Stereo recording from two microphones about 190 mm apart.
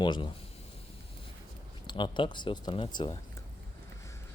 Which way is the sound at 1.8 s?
25° left (ahead or behind).